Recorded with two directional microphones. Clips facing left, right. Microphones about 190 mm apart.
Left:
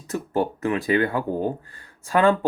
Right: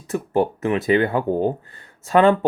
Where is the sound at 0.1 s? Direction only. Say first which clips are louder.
Right 4 dB; 20° right (ahead or behind).